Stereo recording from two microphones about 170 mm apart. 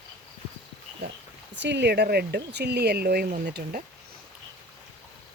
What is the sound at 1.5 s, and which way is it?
Speech, 90° right.